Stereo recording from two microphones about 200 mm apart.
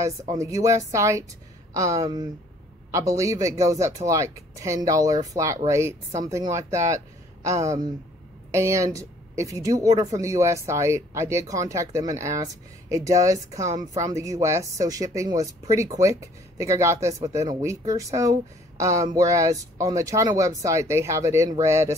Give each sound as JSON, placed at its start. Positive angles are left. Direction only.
{"t": 0.3, "sound": "speech", "side_deg": -15}